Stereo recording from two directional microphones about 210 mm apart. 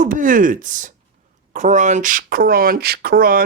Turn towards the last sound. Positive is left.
turn(degrees=-45)  # may be behind; listen again after turning